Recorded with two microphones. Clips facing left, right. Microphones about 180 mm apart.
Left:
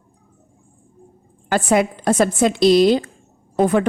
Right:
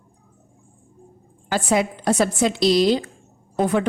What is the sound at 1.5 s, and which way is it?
Speech, 55° left (ahead or behind).